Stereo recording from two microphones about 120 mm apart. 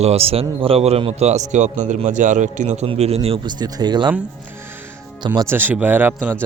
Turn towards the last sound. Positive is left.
turn(degrees=-15)  # may be behind; listen again after turning